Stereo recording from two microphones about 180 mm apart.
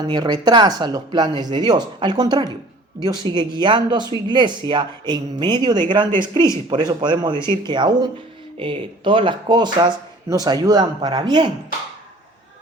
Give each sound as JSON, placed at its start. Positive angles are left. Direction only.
{"t": 0.0, "sound": "speech", "side_deg": -25}